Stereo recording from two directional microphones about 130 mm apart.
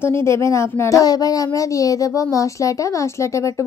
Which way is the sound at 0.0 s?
20° left (ahead or behind).